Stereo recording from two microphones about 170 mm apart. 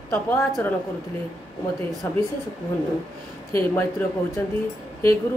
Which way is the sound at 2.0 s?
15° left (ahead or behind).